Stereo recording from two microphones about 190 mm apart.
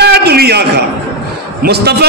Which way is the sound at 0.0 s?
55° right (ahead or behind).